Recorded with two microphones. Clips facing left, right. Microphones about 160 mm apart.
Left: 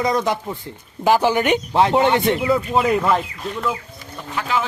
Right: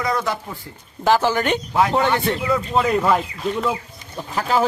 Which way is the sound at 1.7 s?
25° left (ahead or behind).